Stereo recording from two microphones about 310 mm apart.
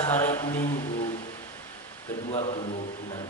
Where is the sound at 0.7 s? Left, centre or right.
Centre.